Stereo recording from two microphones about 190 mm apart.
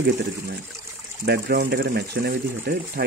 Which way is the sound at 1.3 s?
55° right (ahead or behind).